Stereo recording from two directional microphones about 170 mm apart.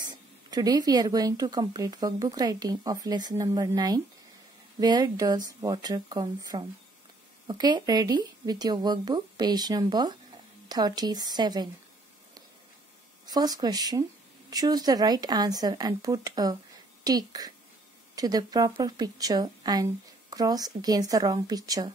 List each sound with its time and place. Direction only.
0.0 s speech: 25° right (ahead or behind)
13.3 s a woman's voice: 20° right (ahead or behind)